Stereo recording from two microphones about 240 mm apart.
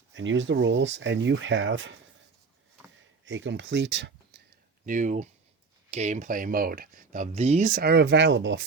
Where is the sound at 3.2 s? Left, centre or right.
Right.